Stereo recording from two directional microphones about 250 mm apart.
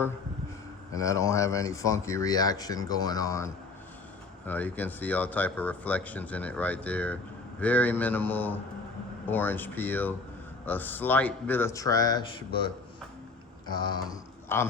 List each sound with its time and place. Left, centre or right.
0.9 s speech: centre
13.7 s speech: centre